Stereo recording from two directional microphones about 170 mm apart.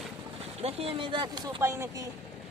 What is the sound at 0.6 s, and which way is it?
Speech, 35° right (ahead or behind).